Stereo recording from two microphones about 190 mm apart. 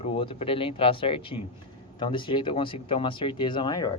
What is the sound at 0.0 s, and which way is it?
A man's voice, 30° left (ahead or behind).